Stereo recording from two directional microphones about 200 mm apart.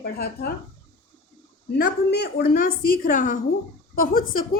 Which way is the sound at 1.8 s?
50° left (ahead or behind).